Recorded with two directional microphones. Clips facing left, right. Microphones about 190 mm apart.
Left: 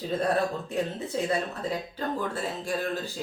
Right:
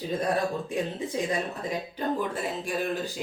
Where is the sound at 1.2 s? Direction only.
15° right (ahead or behind).